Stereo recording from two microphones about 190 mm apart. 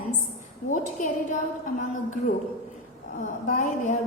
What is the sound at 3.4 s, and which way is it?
Speech, 45° left (ahead or behind).